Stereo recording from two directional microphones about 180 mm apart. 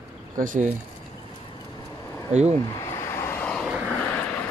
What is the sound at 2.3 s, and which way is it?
Speech, 35° right (ahead or behind).